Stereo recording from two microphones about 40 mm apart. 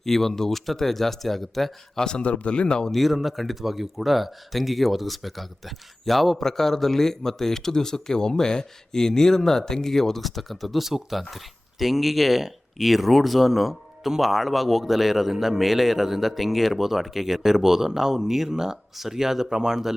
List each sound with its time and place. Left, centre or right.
0.0 s speech: centre
2.0 s speech: left
2.9 s speech: centre